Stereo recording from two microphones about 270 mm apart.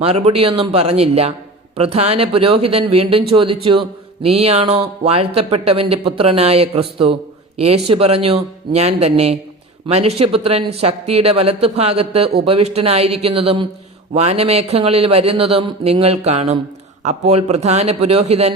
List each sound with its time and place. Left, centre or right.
0.0 s speech: right